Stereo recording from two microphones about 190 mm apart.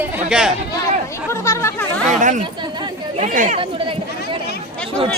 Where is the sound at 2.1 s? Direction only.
40° right (ahead or behind).